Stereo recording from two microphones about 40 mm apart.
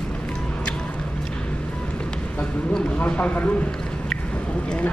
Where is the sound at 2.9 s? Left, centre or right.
Left.